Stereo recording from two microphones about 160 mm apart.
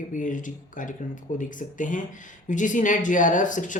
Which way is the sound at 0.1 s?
55° left (ahead or behind).